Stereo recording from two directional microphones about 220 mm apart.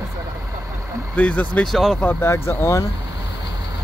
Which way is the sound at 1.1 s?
5° left (ahead or behind).